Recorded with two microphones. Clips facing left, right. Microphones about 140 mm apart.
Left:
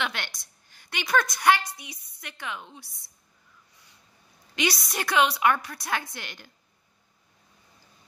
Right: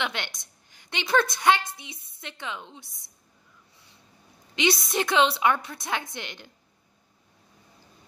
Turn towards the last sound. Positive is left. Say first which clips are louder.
# right 3 dB
turn(degrees=-20)  # may be behind; listen again after turning